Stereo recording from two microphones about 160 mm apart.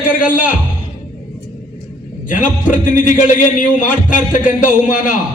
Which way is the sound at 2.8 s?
55° left (ahead or behind).